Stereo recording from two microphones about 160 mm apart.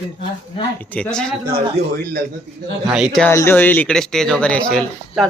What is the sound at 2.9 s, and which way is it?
Speech, 5° right (ahead or behind).